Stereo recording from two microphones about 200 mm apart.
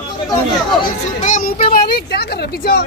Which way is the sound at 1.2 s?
40° left (ahead or behind).